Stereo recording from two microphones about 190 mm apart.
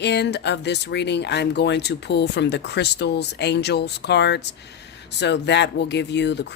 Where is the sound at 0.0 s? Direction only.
65° left (ahead or behind).